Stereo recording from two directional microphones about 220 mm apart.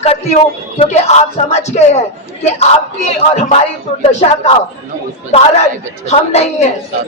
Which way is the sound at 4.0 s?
30° left (ahead or behind).